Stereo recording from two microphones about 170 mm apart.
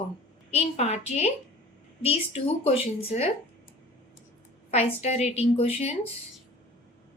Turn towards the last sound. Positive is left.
turn(degrees=35)  # may be behind; listen again after turning